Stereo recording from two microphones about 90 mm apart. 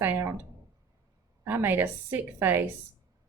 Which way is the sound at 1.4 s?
25° right (ahead or behind).